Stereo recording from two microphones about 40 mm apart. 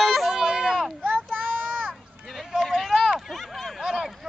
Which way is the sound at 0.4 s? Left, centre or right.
Centre.